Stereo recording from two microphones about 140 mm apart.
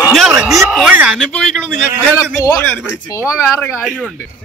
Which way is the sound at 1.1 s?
5° left (ahead or behind).